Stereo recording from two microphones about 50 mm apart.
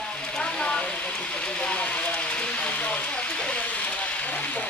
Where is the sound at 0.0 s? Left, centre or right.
Centre.